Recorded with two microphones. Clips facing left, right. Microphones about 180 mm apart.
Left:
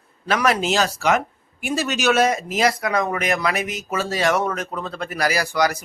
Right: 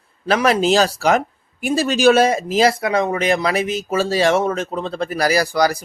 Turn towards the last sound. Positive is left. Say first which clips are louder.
# right 4 dB
turn(degrees=-35)  # may be behind; listen again after turning